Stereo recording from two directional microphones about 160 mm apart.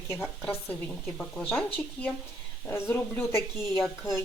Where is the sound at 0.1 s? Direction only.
15° left (ahead or behind).